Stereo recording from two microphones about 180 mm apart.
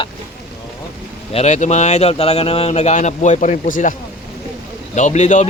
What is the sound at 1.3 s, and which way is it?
Speech, 35° left (ahead or behind).